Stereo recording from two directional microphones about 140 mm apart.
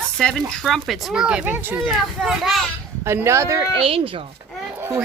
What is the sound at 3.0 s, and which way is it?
Speech, 20° right (ahead or behind).